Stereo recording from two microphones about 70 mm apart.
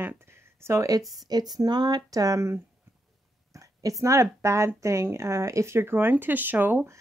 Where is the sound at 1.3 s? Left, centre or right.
Right.